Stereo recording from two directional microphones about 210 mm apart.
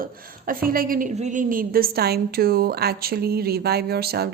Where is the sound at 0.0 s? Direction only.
40° right (ahead or behind).